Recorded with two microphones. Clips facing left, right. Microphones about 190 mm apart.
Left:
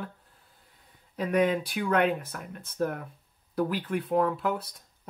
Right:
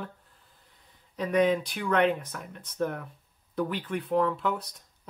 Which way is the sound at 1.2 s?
5° left (ahead or behind).